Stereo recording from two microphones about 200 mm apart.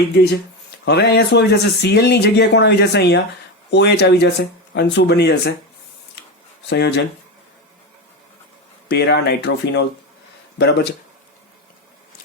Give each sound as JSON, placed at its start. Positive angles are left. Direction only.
{"t": 0.9, "sound": "speech", "side_deg": 55}
{"t": 6.7, "sound": "speech", "side_deg": 55}
{"t": 8.9, "sound": "speech", "side_deg": 55}